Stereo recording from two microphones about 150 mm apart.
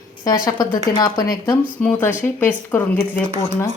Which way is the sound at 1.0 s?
30° left (ahead or behind).